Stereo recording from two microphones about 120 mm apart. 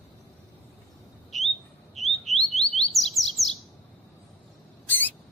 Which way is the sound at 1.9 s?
Centre (ahead or behind).